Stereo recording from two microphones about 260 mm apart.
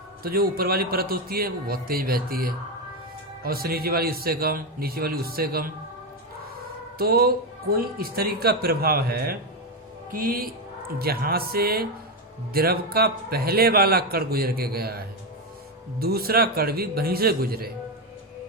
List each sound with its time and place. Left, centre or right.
0.2 s a man's voice: right
7.0 s a man's voice: right